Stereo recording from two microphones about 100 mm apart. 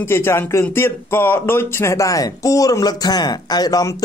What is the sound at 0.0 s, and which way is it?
Speech, 25° left (ahead or behind).